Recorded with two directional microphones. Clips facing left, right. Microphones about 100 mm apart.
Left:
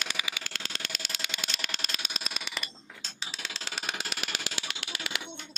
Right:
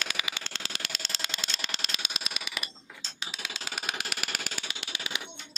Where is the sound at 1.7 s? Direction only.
40° left (ahead or behind).